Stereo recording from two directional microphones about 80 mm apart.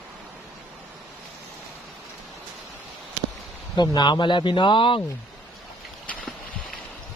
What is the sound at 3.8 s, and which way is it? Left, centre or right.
Speech, left.